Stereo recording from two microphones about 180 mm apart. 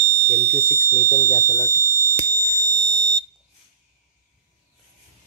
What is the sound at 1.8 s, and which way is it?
Fire alarm, 15° right (ahead or behind).